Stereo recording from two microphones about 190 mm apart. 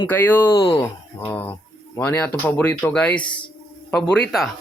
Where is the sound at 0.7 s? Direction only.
25° left (ahead or behind).